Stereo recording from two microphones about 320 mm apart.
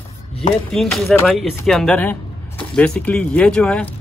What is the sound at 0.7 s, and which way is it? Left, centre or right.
Speech, centre.